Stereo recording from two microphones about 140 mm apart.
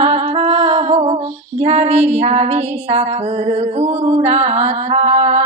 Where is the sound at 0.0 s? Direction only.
50° right (ahead or behind).